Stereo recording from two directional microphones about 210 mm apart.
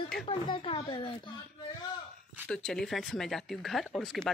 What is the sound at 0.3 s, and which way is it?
Speech, 25° left (ahead or behind).